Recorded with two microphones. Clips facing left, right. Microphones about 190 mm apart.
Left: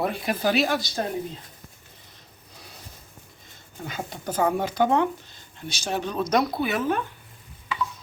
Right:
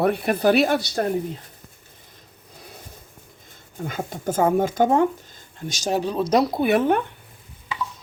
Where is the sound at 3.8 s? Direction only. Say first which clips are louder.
Right 5 dB; 50° right (ahead or behind); by 6.5 s 30° right (ahead or behind).